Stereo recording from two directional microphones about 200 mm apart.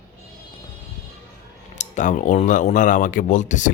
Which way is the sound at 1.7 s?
35° left (ahead or behind).